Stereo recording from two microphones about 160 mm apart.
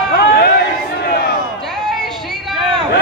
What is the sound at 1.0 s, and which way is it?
Crowd, 75° left (ahead or behind).